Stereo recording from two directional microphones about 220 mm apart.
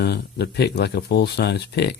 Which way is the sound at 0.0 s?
50° left (ahead or behind).